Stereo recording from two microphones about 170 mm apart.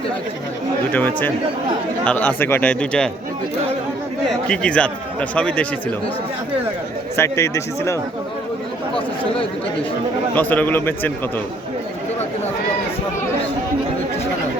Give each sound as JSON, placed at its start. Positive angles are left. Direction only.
{"t": 0.9, "sound": "a man's voice", "side_deg": 10}
{"t": 4.3, "sound": "a man's voice", "side_deg": 5}
{"t": 7.2, "sound": "a man's voice", "side_deg": 15}
{"t": 10.3, "sound": "a man's voice", "side_deg": 10}